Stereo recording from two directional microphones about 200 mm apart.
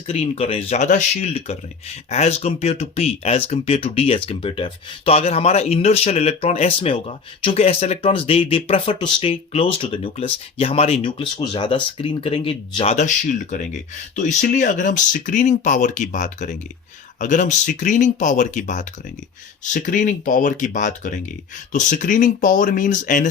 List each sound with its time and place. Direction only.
0.1 s speech: 30° left (ahead or behind)